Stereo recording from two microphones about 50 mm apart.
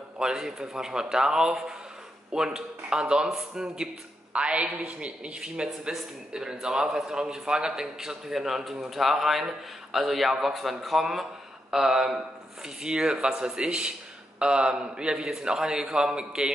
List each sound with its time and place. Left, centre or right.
0.2 s a man's voice: centre